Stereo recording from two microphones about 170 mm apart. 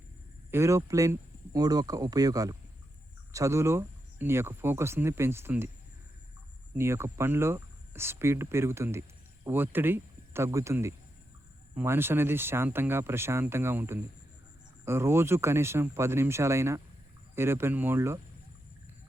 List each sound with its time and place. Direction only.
0.5 s speech: 15° right (ahead or behind)
6.7 s speech: 15° right (ahead or behind)